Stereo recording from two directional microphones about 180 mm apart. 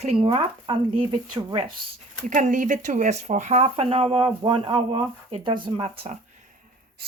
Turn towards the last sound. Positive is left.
turn(degrees=-35)  # may be behind; listen again after turning